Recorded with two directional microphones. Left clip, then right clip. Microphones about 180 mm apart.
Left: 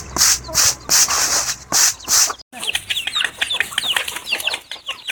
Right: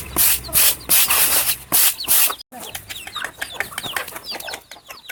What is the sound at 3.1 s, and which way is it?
Chicken, 50° right (ahead or behind).